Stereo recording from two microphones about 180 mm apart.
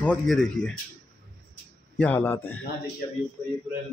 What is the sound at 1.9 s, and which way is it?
Speech, 10° left (ahead or behind).